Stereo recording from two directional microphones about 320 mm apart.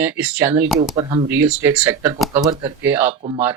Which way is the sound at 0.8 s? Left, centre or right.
Right.